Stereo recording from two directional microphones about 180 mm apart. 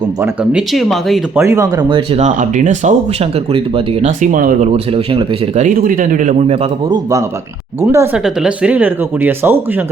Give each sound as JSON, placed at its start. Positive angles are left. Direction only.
{"t": 0.2, "sound": "speech", "side_deg": -5}
{"t": 1.4, "sound": "speech", "side_deg": -15}
{"t": 4.0, "sound": "speech", "side_deg": -45}
{"t": 4.7, "sound": "speech", "side_deg": -30}
{"t": 5.6, "sound": "speech", "side_deg": -50}
{"t": 6.9, "sound": "speech", "side_deg": -15}